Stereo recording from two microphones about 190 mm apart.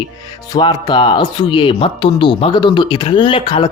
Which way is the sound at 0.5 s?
20° left (ahead or behind).